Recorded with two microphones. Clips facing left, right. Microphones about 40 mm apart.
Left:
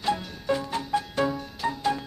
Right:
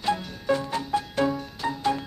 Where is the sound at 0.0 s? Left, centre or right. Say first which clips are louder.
Right 1 dB; centre.